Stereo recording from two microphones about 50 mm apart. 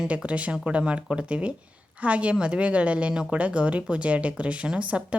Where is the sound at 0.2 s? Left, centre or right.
Right.